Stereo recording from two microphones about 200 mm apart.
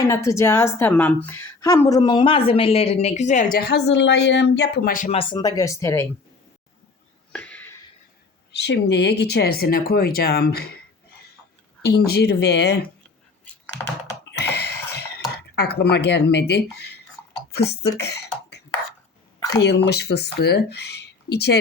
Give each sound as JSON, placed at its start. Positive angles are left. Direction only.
{"t": 0.0, "sound": "a woman's voice", "side_deg": 15}
{"t": 5.1, "sound": "speech", "side_deg": 25}
{"t": 7.3, "sound": "a sound", "side_deg": 5}
{"t": 8.5, "sound": "speech", "side_deg": 60}
{"t": 11.9, "sound": "speech", "side_deg": 50}
{"t": 14.3, "sound": "a sound", "side_deg": 55}
{"t": 15.5, "sound": "speech", "side_deg": 55}
{"t": 17.8, "sound": "throat clearing", "side_deg": 55}
{"t": 19.6, "sound": "speech", "side_deg": 55}